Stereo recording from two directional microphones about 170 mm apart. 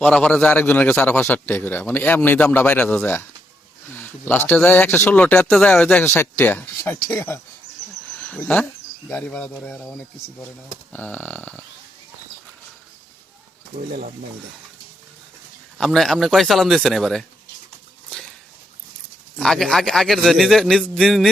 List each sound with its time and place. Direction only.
0.0 s a man's voice: 5° left (ahead or behind)
13.7 s speech: 50° right (ahead or behind)
15.8 s a man's voice: centre (ahead or behind)
19.4 s a man's voice: 5° left (ahead or behind)